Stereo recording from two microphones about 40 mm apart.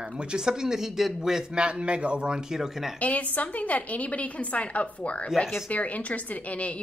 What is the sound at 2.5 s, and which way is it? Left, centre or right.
Speech, centre.